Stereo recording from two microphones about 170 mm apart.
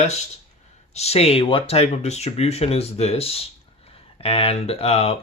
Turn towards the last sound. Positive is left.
turn(degrees=35)  # may be behind; listen again after turning